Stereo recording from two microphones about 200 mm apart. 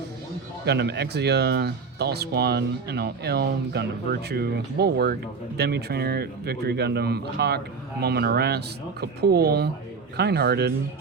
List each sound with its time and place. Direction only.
0.6 s speech: 55° right (ahead or behind)